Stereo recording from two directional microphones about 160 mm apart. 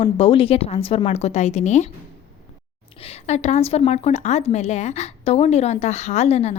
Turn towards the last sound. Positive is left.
turn(degrees=45)  # may be behind; listen again after turning